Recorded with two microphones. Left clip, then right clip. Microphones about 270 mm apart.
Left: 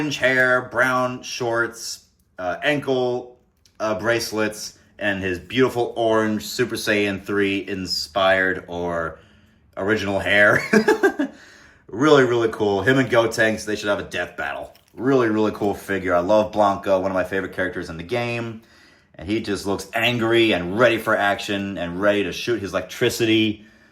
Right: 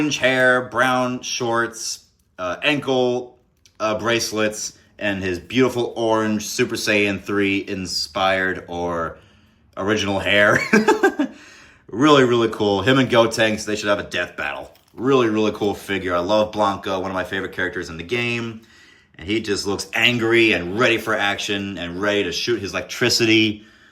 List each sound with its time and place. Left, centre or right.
0.0 s speech: centre
7.9 s speech: right
8.1 s speech: centre